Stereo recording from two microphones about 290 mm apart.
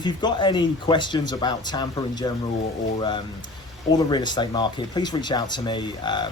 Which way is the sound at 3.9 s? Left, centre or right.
Centre.